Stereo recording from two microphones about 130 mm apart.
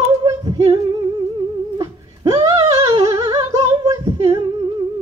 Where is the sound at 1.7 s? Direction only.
30° right (ahead or behind).